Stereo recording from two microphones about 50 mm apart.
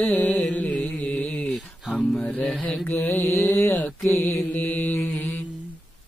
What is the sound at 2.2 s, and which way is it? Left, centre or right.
Mantra, left.